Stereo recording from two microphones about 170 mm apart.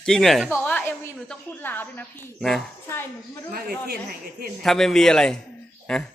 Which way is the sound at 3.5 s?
60° right (ahead or behind).